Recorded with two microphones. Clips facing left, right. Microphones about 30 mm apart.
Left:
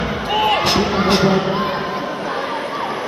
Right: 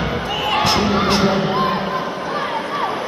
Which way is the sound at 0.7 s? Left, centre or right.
Right.